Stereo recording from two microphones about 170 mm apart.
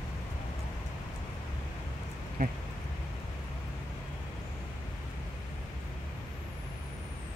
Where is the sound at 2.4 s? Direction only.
55° right (ahead or behind).